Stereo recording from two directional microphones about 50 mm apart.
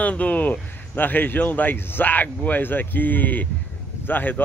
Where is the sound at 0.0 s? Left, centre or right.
Left.